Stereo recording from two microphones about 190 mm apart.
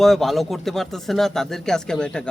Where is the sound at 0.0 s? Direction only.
Centre (ahead or behind).